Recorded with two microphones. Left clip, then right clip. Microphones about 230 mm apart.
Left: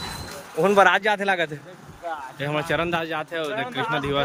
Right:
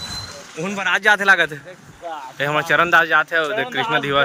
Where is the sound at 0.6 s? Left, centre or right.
Left.